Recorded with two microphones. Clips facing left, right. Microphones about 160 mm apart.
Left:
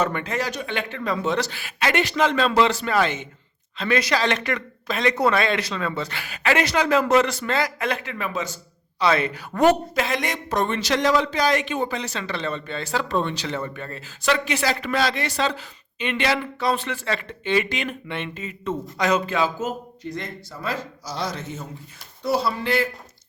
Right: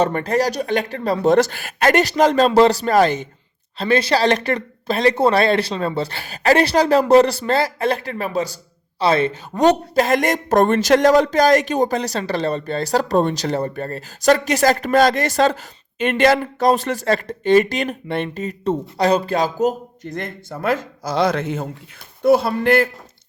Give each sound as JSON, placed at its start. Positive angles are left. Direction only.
{"t": 0.0, "sound": "a woman's voice", "side_deg": -40}
{"t": 9.9, "sound": "speech", "side_deg": -45}
{"t": 20.1, "sound": "speech", "side_deg": -55}